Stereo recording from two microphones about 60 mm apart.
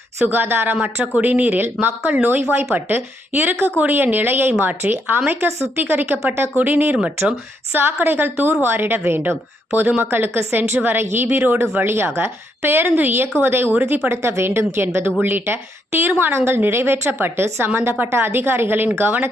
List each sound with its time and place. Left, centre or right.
0.3 s a woman's voice: right